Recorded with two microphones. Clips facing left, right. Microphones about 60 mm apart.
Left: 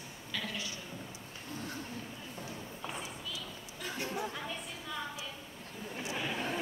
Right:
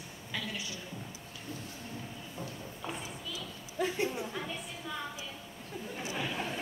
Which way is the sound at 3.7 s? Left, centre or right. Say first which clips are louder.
Right 8 dB; right.